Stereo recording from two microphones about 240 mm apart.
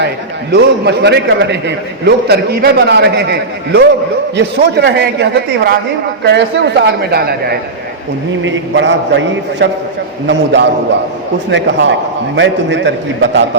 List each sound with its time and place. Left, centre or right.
0.5 s a man's voice: right